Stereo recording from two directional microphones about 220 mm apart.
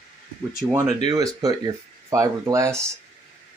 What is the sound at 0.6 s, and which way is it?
Speech, 10° right (ahead or behind).